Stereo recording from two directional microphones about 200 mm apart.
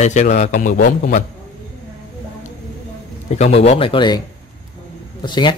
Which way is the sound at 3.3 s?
30° left (ahead or behind).